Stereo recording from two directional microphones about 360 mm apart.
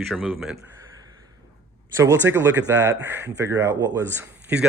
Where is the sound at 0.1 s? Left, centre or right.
Centre.